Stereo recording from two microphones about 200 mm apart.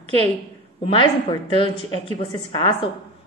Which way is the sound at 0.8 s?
30° left (ahead or behind).